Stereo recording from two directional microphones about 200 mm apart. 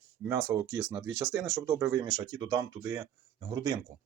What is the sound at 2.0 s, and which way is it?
Speech, 20° right (ahead or behind).